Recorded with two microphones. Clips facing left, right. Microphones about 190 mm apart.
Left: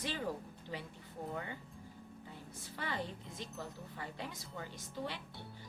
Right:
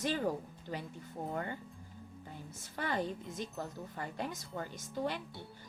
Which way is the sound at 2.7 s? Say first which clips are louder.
Right 6 dB; 45° right (ahead or behind).